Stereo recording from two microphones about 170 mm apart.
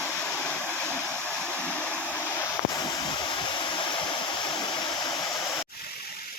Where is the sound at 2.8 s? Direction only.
25° left (ahead or behind).